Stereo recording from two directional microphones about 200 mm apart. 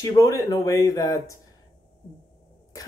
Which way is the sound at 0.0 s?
15° left (ahead or behind).